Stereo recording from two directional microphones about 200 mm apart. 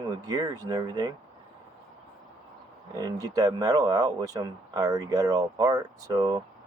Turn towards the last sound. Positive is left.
turn(degrees=-20)  # may be behind; listen again after turning